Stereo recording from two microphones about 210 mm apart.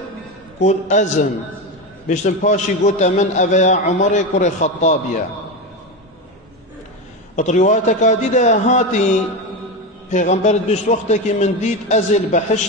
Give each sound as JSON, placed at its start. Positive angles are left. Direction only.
{"t": 0.6, "sound": "a man's voice", "side_deg": 35}
{"t": 7.3, "sound": "a man's voice", "side_deg": 35}
{"t": 10.1, "sound": "a man's voice", "side_deg": 35}